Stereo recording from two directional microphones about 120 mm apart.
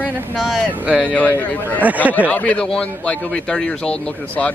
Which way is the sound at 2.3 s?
10° left (ahead or behind).